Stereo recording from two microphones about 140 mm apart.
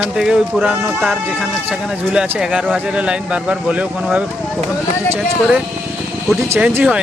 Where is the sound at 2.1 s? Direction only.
5° right (ahead or behind).